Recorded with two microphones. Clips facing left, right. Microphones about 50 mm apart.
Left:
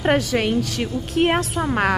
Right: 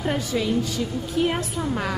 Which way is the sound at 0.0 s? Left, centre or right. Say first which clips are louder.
Left 5 dB; left.